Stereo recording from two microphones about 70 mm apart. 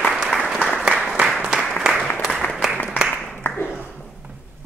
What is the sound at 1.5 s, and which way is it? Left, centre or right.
Applause, centre.